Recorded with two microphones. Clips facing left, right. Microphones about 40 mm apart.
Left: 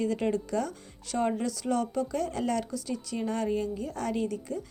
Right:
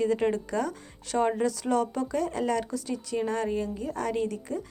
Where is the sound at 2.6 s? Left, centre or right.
Right.